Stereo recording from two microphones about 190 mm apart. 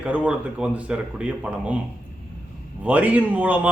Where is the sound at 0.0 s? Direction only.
5° right (ahead or behind).